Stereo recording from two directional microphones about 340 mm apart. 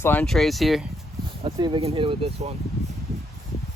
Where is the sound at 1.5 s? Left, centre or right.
Centre.